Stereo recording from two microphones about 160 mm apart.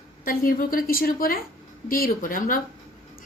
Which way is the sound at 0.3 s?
60° left (ahead or behind).